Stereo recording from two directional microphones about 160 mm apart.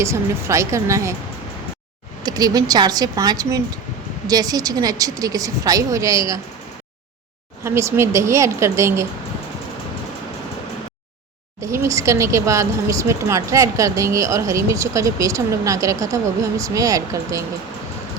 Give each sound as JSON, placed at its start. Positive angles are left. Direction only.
{"t": 0.0, "sound": "a woman's voice", "side_deg": -20}
{"t": 2.2, "sound": "speech", "side_deg": -25}
{"t": 7.6, "sound": "a woman's voice", "side_deg": -15}
{"t": 11.6, "sound": "speech", "side_deg": -15}